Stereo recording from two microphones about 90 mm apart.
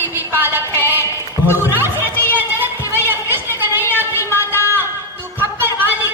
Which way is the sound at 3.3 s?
25° right (ahead or behind).